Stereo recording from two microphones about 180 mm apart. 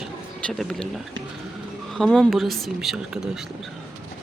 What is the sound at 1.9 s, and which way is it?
Speech, centre (ahead or behind).